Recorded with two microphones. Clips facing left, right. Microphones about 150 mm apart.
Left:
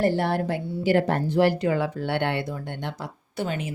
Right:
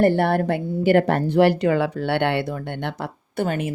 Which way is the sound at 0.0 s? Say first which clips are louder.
Right 5 dB; 55° right (ahead or behind).